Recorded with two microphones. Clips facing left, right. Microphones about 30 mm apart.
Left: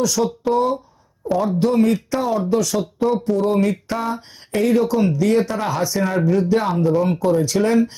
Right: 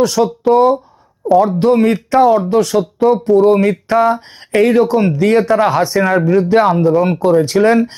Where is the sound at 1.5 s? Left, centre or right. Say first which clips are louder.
Right 5 dB; right.